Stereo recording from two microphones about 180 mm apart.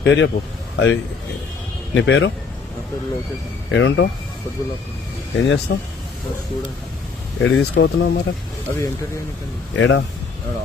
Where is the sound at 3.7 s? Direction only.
90° left.